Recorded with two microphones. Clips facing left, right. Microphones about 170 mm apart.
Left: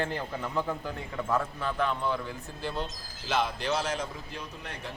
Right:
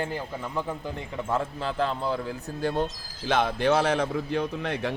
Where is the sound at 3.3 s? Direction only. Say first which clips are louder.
Right 6 dB; 55° right (ahead or behind); by 4.9 s 70° right (ahead or behind).